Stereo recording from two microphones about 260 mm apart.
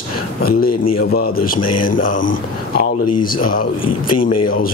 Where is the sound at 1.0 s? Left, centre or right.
Left.